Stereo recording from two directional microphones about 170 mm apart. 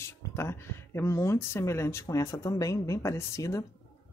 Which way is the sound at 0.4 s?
15° left (ahead or behind).